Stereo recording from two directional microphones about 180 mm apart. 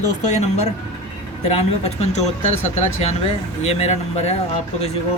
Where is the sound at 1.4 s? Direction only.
35° left (ahead or behind).